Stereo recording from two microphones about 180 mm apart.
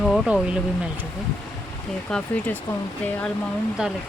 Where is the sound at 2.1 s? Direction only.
5° left (ahead or behind).